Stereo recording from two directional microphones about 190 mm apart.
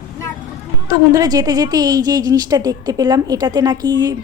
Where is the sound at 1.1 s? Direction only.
20° right (ahead or behind).